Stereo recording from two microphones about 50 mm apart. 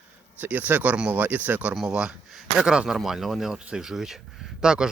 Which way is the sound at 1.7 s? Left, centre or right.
Centre.